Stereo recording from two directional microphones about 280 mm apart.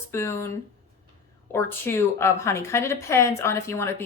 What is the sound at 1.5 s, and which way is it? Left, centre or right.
Speech, centre.